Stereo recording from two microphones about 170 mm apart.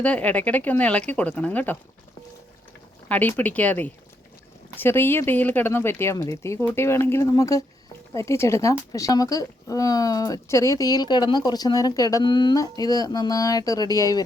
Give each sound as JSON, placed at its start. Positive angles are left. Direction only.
{"t": 0.0, "sound": "speech", "side_deg": 10}
{"t": 3.1, "sound": "speech", "side_deg": 10}